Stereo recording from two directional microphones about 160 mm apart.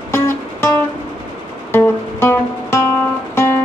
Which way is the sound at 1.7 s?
15° left (ahead or behind).